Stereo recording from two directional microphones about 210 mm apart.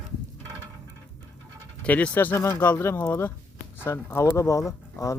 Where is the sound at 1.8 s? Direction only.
5° left (ahead or behind).